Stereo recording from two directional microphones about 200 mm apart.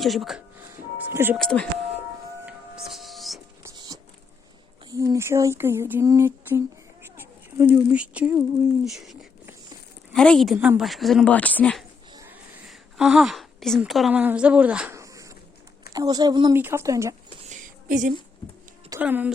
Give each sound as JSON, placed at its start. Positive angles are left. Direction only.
{"t": 0.0, "sound": "speech", "side_deg": 0}
{"t": 1.4, "sound": "speech", "side_deg": 5}
{"t": 2.5, "sound": "music", "side_deg": 0}
{"t": 3.6, "sound": "a sound", "side_deg": -20}
{"t": 4.9, "sound": "speech", "side_deg": -15}
{"t": 12.1, "sound": "cat", "side_deg": -15}
{"t": 12.6, "sound": "a woman's voice", "side_deg": -5}
{"t": 17.5, "sound": "a sound", "side_deg": -40}
{"t": 18.9, "sound": "speech", "side_deg": -10}